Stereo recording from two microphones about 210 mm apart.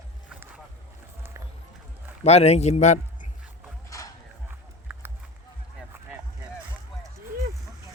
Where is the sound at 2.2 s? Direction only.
30° left (ahead or behind).